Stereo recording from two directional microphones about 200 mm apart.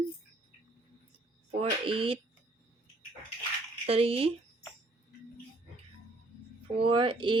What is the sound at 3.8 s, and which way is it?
Speech, 30° right (ahead or behind).